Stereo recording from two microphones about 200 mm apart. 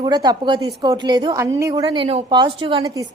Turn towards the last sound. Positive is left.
turn(degrees=-15)  # may be behind; listen again after turning